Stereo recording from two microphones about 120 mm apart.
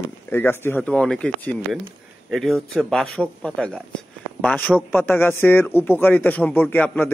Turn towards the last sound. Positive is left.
turn(degrees=15)  # may be behind; listen again after turning